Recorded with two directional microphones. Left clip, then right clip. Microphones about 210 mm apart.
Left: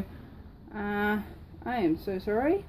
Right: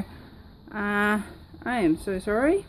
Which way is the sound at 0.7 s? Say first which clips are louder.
Right 5 dB; 35° right (ahead or behind).